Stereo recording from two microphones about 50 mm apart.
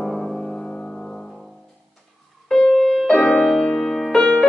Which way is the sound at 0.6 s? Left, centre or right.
Left.